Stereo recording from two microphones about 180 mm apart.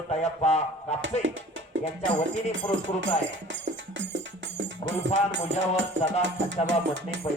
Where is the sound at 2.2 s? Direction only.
90° right.